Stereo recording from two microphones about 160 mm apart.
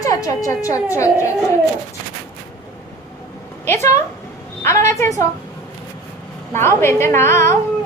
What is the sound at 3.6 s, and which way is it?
A woman's voice, 15° left (ahead or behind).